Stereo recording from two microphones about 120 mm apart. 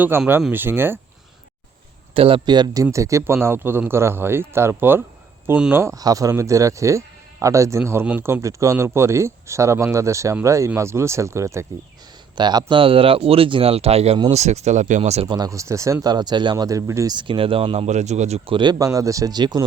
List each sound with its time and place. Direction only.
0.1 s speech: 20° right (ahead or behind)
2.1 s speech: 50° right (ahead or behind)
2.8 s speech: 25° right (ahead or behind)
12.4 s speech: 40° right (ahead or behind); by 14.2 s 55° right (ahead or behind)
14.3 s speech: 70° right (ahead or behind)
15.3 s speech: 30° right (ahead or behind)
17.2 s speech: 45° right (ahead or behind)
17.8 s speech: 75° right (ahead or behind)
18.5 s speech: 35° right (ahead or behind)